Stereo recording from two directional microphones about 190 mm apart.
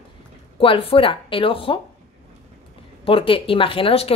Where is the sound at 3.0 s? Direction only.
30° left (ahead or behind).